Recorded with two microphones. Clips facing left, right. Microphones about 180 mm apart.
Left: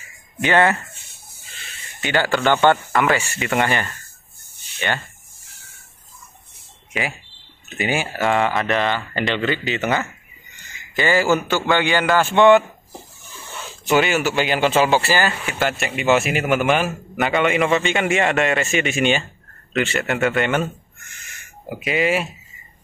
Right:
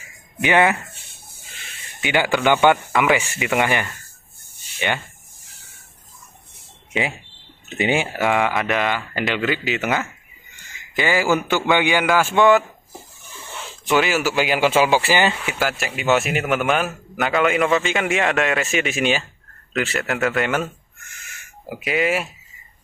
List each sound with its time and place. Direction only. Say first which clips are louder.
0.4 s a man's voice: even; 15° right (ahead or behind)
2.0 s a man's voice: even; 15° right (ahead or behind)
6.9 s speech: right 2 dB; 25° right (ahead or behind)
8.3 s a man's voice: left 2 dB; 5° right (ahead or behind)
13.8 s a man's voice: left 1 dB; centre (ahead or behind); by 15.5 s 15° right (ahead or behind)
15.6 s a man's voice: left 2 dB; centre (ahead or behind)
21.6 s a man's voice: left 1 dB; centre (ahead or behind)